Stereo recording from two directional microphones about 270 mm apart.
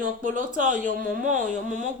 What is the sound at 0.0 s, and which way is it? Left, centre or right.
A man's voice, right.